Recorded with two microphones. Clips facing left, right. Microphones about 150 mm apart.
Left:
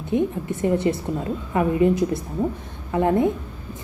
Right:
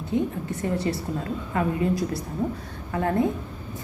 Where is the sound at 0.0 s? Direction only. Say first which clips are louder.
Left 3 dB; 20° left (ahead or behind).